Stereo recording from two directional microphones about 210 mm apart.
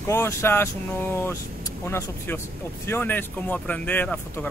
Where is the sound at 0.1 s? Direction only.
15° left (ahead or behind).